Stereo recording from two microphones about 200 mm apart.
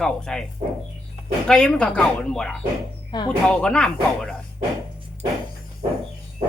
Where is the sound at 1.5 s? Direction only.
5° left (ahead or behind).